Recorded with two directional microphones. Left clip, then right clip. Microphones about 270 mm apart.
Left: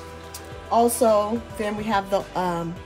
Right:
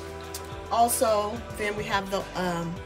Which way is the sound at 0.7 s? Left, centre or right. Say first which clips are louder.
Left 4 dB; left.